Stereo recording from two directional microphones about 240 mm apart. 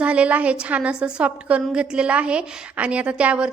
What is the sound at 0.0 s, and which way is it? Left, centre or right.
A woman's voice, centre.